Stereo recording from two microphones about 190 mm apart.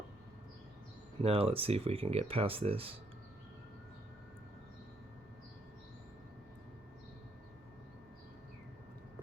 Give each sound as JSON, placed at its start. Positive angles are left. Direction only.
{"t": 1.2, "sound": "speech", "side_deg": -30}